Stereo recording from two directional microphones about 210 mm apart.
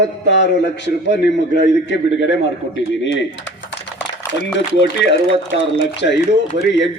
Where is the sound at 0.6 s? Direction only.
55° left (ahead or behind).